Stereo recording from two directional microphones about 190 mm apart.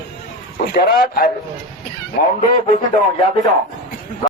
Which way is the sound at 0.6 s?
55° left (ahead or behind).